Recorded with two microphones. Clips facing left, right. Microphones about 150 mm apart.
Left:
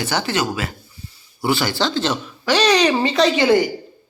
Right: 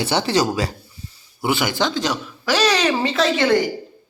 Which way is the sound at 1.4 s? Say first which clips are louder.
Left 1 dB; 20° right (ahead or behind).